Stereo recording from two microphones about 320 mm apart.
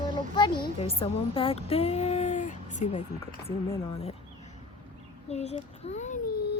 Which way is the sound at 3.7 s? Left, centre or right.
Centre.